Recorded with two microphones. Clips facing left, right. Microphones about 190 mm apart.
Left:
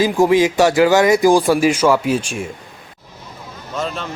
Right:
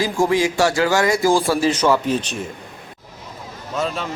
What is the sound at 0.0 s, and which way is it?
Speech, 20° left (ahead or behind).